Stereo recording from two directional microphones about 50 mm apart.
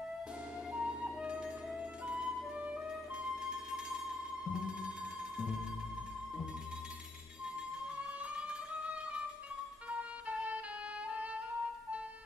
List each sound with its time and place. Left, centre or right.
0.7 s flute: right
8.0 s music: right